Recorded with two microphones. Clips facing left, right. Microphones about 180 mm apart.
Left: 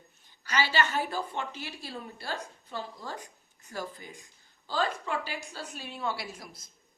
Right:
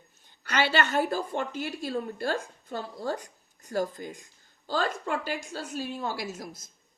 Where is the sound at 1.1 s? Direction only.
45° right (ahead or behind).